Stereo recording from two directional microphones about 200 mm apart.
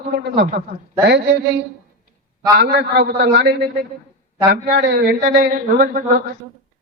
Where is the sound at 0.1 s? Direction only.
55° right (ahead or behind).